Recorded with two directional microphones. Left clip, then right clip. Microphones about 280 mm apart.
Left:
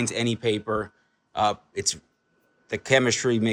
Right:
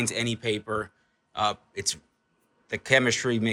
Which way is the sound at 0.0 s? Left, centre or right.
Centre.